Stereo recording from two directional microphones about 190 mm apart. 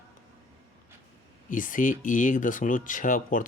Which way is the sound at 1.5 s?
45° left (ahead or behind).